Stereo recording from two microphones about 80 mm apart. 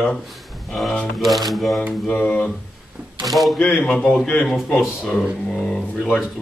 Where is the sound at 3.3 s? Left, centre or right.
Centre.